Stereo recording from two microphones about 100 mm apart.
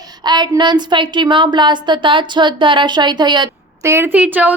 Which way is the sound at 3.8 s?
25° right (ahead or behind).